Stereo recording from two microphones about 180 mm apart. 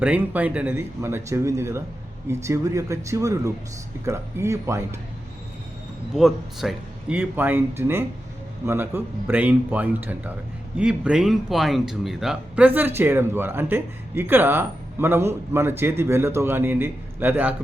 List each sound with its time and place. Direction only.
0.0 s speech: 10° right (ahead or behind)
6.1 s speech: centre (ahead or behind)